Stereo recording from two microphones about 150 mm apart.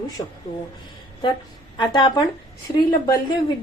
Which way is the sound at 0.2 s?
25° left (ahead or behind).